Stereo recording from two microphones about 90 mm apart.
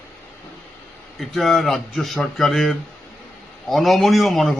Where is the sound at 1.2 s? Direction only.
Centre (ahead or behind).